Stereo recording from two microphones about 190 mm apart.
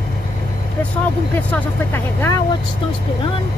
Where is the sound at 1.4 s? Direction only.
10° left (ahead or behind).